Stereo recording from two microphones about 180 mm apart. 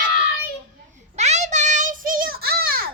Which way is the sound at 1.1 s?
40° right (ahead or behind).